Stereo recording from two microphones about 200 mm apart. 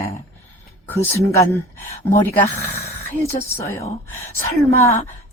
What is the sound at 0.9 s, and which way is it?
A woman's voice, 15° left (ahead or behind).